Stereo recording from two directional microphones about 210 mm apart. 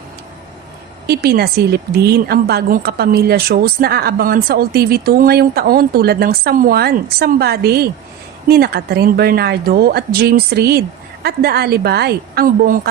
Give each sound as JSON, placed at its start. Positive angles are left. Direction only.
{"t": 1.0, "sound": "a woman's voice", "side_deg": -45}